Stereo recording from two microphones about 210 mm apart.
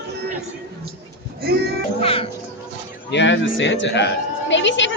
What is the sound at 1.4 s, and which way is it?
Speech, 45° right (ahead or behind).